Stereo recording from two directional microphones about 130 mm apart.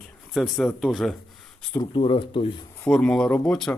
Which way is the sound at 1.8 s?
40° left (ahead or behind).